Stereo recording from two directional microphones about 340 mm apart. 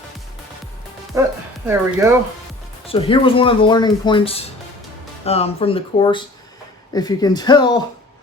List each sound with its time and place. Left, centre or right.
1.1 s speech: centre
2.8 s speech: centre